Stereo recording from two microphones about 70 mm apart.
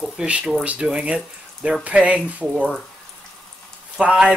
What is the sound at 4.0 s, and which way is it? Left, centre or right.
Speech, centre.